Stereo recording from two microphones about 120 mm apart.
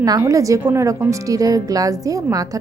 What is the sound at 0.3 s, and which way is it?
A woman's voice, 25° right (ahead or behind).